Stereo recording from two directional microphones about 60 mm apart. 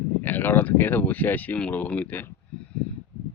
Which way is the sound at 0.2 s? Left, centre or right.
Left.